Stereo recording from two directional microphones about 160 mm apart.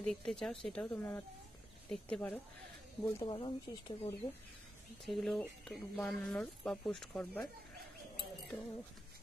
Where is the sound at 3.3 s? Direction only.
30° left (ahead or behind).